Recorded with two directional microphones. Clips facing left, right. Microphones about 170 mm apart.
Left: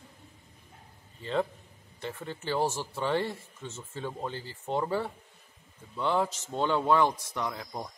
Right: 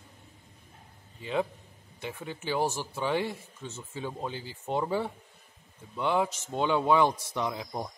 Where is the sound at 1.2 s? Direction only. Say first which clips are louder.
Even; 10° right (ahead or behind).